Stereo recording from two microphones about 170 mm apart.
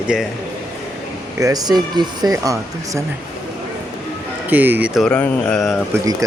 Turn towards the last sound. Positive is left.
turn(degrees=-20)  # may be behind; listen again after turning